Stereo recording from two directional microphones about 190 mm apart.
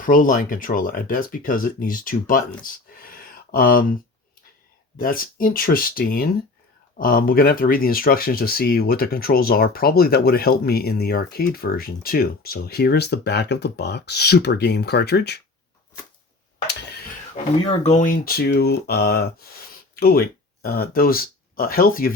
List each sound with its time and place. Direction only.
0.0 s speech: 45° left (ahead or behind)
3.0 s a sound: 50° left (ahead or behind)
4.9 s speech: 50° left (ahead or behind)
17.6 s speech: 30° left (ahead or behind); by 22.1 s 50° left (ahead or behind)